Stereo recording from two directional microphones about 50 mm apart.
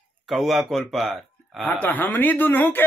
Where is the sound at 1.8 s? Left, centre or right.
Left.